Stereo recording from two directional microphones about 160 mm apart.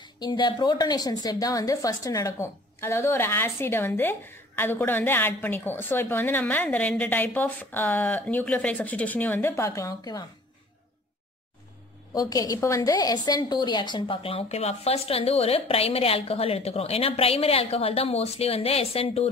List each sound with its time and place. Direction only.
0.0 s a woman's voice: 25° left (ahead or behind)
12.1 s a woman's voice: 20° left (ahead or behind); by 19.2 s 40° left (ahead or behind)